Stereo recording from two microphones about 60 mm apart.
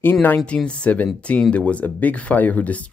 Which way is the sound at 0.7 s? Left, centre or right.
Left.